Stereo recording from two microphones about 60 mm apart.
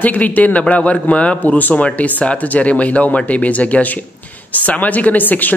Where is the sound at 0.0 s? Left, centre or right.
Left.